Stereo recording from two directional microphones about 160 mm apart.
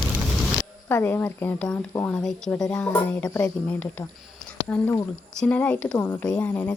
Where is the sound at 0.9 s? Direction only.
15° left (ahead or behind).